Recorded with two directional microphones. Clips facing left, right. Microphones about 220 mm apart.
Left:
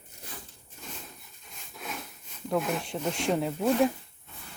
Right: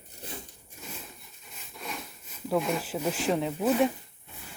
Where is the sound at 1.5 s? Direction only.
Centre (ahead or behind).